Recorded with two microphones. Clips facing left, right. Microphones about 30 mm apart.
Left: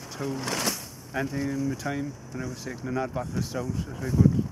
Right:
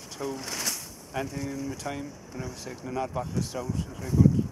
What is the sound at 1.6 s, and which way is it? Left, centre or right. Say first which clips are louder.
Speech: left 4 dB; centre.